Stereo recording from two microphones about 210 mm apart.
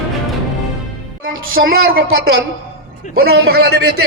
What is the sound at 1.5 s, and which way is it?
A man's voice, 45° right (ahead or behind).